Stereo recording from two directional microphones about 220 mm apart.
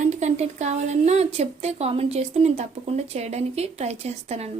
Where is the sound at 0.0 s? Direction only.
30° right (ahead or behind).